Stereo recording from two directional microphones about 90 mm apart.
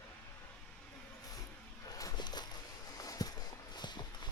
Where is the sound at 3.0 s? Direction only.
40° left (ahead or behind).